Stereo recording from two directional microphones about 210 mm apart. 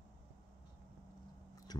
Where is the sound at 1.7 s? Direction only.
20° left (ahead or behind).